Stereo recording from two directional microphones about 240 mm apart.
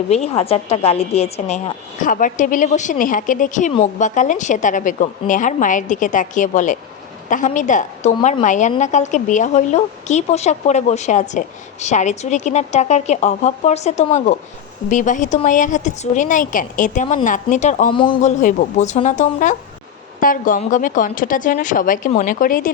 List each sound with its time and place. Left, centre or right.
0.1 s a woman's voice: left